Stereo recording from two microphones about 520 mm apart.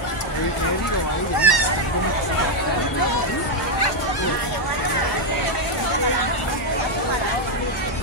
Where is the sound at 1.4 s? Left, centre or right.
Left.